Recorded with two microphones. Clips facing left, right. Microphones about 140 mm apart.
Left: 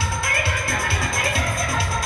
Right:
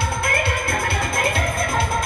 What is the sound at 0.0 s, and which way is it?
Music, 55° right (ahead or behind).